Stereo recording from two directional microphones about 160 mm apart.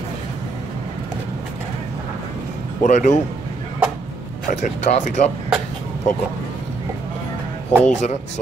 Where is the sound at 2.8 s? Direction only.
50° left (ahead or behind).